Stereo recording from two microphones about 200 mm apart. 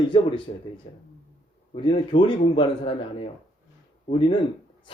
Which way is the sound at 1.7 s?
25° left (ahead or behind).